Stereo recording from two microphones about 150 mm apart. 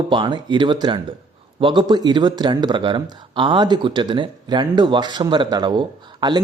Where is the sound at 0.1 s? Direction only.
30° right (ahead or behind).